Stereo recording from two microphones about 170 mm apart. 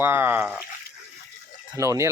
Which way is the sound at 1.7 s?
20° right (ahead or behind).